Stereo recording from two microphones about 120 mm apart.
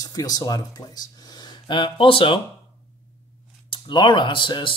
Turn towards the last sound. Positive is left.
turn(degrees=45)  # may be behind; listen again after turning